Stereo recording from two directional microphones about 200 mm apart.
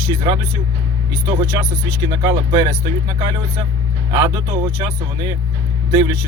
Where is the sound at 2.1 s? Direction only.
20° right (ahead or behind).